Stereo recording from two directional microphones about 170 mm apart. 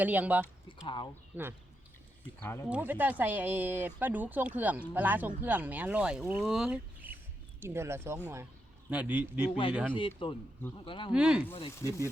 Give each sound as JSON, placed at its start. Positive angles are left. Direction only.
{"t": 0.0, "sound": "speech", "side_deg": -10}
{"t": 0.7, "sound": "speech", "side_deg": 30}
{"t": 1.3, "sound": "speech", "side_deg": -10}
{"t": 2.4, "sound": "speech", "side_deg": 15}
{"t": 2.6, "sound": "speech", "side_deg": -10}
{"t": 9.9, "sound": "speech", "side_deg": 30}
{"t": 11.1, "sound": "speech", "side_deg": -5}
{"t": 11.8, "sound": "speech", "side_deg": -15}